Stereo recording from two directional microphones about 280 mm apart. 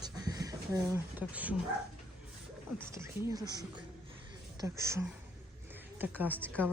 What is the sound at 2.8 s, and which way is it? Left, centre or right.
A woman's voice, centre.